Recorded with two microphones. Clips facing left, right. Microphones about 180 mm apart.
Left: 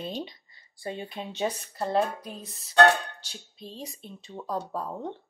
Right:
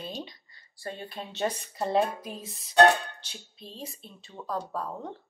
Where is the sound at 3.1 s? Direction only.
10° left (ahead or behind).